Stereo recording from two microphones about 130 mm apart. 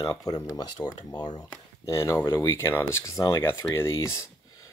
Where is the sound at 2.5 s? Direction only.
20° left (ahead or behind).